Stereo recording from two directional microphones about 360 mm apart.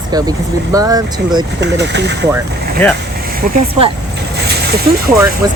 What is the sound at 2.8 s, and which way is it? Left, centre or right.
Speech, centre.